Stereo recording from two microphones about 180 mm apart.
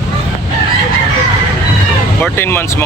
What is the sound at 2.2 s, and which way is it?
Speech, 10° left (ahead or behind).